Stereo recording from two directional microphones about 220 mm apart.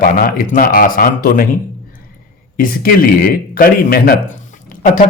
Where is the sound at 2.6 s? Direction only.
40° left (ahead or behind).